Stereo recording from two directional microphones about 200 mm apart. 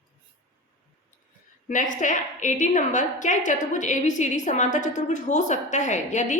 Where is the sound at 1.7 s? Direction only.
40° left (ahead or behind).